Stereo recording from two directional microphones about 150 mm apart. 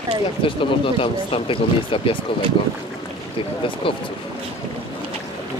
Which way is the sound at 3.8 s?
35° left (ahead or behind).